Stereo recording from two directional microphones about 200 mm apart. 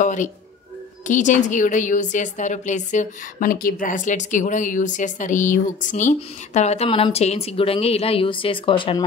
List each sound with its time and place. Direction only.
0.0 s music: 40° left (ahead or behind)
1.0 s a woman's voice: 40° left (ahead or behind)